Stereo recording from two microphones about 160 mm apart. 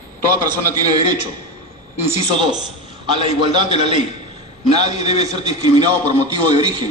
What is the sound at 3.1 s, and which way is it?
Speech, 30° right (ahead or behind).